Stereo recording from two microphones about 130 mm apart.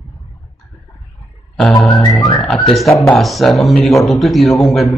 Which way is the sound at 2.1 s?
30° left (ahead or behind).